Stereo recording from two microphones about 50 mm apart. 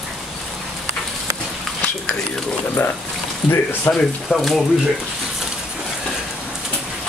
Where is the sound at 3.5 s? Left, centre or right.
Left.